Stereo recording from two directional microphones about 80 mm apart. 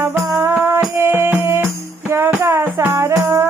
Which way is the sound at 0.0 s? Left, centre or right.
Right.